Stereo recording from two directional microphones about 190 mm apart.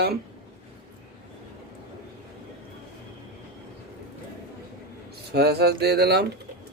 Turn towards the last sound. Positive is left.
turn(degrees=-55)  # may be behind; listen again after turning